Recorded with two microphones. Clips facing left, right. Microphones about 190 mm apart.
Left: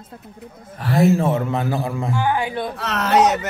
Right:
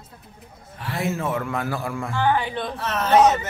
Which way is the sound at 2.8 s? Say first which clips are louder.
Even; 80° left.